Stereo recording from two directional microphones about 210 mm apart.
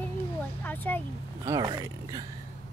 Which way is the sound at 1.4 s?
15° right (ahead or behind).